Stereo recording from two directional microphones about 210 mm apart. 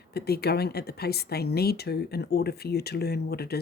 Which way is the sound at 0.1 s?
50° left (ahead or behind).